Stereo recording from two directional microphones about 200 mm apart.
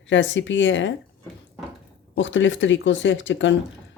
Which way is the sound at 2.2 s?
70° left (ahead or behind).